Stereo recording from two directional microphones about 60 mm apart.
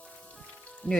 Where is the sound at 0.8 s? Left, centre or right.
Left.